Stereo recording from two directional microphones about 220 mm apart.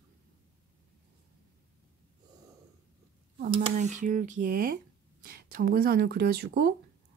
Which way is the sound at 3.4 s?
35° right (ahead or behind).